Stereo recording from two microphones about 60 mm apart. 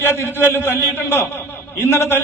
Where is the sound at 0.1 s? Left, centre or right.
Left.